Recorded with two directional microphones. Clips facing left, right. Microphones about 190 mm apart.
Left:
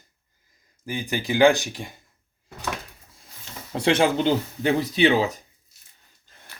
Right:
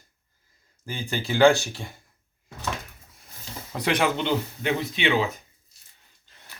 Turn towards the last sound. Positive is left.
turn(degrees=35)  # may be behind; listen again after turning